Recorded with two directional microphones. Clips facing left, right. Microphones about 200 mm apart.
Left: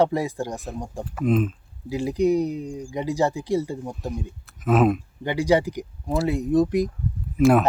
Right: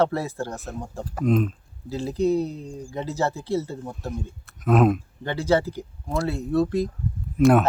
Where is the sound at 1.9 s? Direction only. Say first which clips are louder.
Left 2 dB; 15° left (ahead or behind).